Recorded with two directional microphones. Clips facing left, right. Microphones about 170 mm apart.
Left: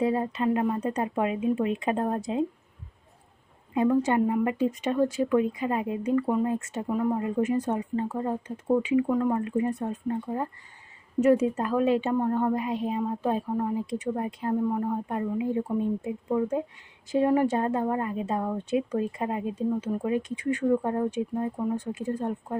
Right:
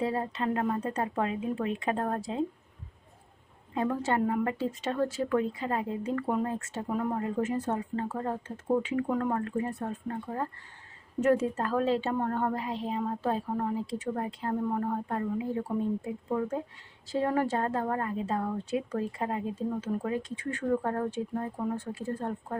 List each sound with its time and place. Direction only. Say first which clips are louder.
0.0 s a woman's voice: left 5 dB; 20° left (ahead or behind)
3.8 s a woman's voice: left 6 dB; 15° left (ahead or behind)